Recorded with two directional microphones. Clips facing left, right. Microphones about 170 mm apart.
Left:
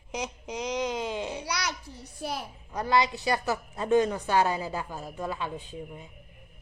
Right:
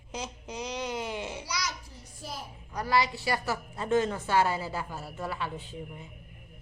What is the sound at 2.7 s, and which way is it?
A woman's voice, 20° left (ahead or behind).